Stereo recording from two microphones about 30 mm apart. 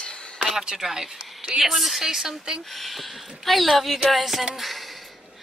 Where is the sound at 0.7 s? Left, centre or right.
Centre.